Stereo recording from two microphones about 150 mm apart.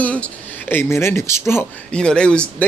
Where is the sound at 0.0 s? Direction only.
10° left (ahead or behind).